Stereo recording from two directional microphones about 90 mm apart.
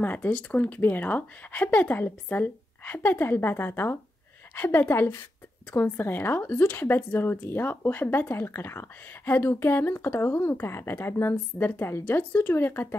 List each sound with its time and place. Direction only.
0.0 s speech: 20° left (ahead or behind)